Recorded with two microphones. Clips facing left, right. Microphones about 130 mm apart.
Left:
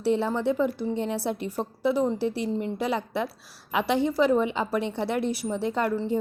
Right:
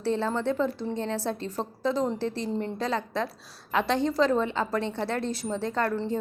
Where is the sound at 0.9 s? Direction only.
15° left (ahead or behind).